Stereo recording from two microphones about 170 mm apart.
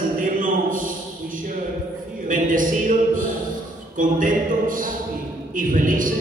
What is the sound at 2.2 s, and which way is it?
A man's voice, 50° right (ahead or behind).